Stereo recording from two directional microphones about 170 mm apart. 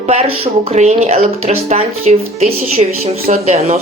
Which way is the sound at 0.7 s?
40° right (ahead or behind).